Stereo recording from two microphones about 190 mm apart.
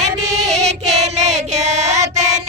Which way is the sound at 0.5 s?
35° right (ahead or behind).